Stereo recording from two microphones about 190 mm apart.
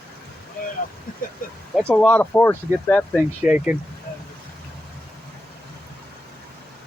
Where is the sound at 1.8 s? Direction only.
5° left (ahead or behind).